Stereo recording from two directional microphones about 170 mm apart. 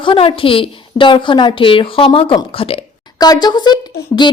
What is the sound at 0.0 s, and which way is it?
A woman's voice, 30° left (ahead or behind).